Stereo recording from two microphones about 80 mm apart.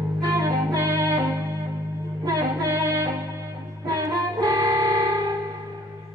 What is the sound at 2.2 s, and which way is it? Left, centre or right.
Music, right.